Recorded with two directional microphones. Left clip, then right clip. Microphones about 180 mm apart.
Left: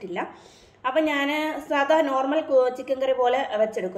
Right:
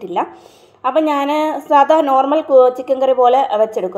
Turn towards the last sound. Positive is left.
turn(degrees=-30)  # may be behind; listen again after turning